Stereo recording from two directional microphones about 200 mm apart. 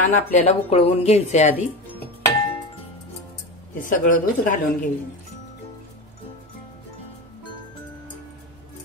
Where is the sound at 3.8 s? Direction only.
40° left (ahead or behind).